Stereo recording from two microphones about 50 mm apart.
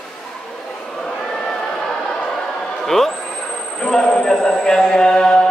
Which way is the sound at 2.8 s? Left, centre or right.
Centre.